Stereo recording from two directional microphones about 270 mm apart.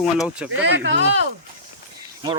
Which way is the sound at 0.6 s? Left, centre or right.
Right.